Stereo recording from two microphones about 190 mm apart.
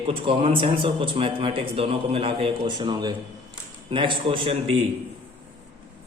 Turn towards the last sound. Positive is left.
turn(degrees=-30)  # may be behind; listen again after turning